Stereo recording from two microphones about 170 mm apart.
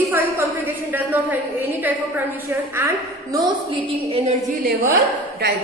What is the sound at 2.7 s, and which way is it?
A woman's voice, 20° right (ahead or behind).